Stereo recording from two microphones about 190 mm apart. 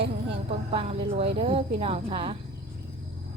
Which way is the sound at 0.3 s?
30° right (ahead or behind).